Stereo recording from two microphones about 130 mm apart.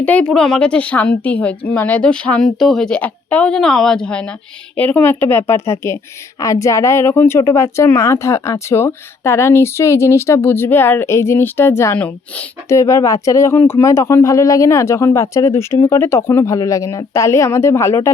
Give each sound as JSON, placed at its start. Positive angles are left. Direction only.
{"t": 0.0, "sound": "speech", "side_deg": 10}
{"t": 12.6, "sound": "speech", "side_deg": 25}